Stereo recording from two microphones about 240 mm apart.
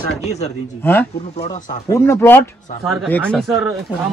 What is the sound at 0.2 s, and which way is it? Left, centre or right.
Speech, left.